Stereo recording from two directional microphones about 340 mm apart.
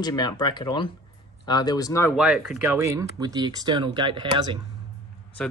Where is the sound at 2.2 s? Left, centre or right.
Centre.